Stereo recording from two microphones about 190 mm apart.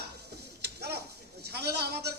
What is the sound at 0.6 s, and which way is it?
Tick-tock, 60° right (ahead or behind).